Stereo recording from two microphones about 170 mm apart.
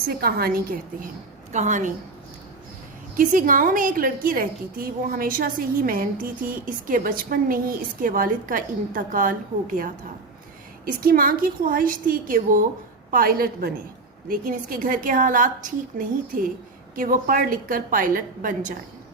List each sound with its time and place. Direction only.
0.1 s a woman's voice: 65° right (ahead or behind)
1.5 s a woman's voice: 45° right (ahead or behind)
3.2 s a woman's voice: 55° right (ahead or behind)
11.0 s a woman's voice: 55° right (ahead or behind)